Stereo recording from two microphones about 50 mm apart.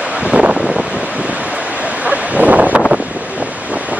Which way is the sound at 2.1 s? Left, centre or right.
Right.